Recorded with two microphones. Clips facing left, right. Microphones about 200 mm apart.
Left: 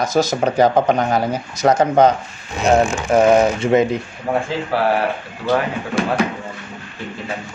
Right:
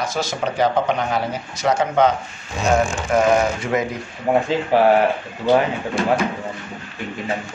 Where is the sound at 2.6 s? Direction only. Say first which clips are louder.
Left 3 dB; 20° left (ahead or behind).